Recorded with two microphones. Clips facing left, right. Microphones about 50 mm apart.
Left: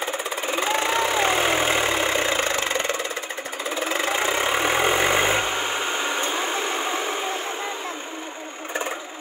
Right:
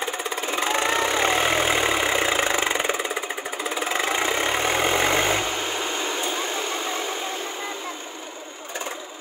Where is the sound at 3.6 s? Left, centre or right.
Centre.